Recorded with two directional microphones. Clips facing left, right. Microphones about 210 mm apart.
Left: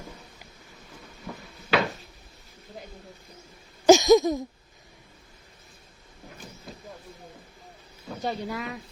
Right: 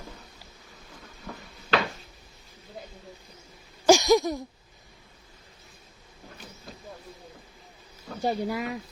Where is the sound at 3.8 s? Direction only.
20° left (ahead or behind).